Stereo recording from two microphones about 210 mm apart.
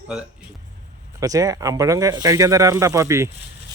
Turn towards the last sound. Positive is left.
turn(degrees=-15)  # may be behind; listen again after turning